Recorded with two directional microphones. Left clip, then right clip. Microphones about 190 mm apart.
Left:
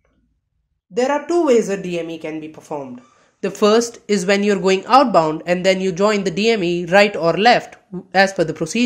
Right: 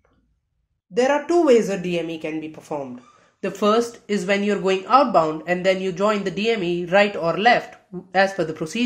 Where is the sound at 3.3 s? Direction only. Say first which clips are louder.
Left 4 dB; 30° left (ahead or behind).